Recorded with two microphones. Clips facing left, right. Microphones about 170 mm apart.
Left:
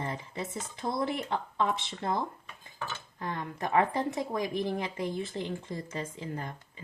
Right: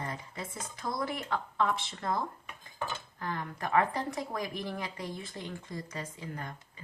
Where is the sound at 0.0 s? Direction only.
25° left (ahead or behind).